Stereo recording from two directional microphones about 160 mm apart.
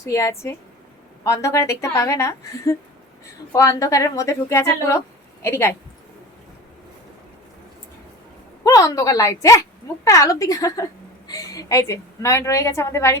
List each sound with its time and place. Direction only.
0.0 s a woman's voice: 20° left (ahead or behind)
8.6 s a woman's voice: 20° left (ahead or behind)